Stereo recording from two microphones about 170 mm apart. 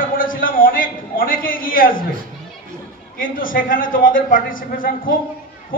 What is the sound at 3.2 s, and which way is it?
A man's voice, 55° left (ahead or behind).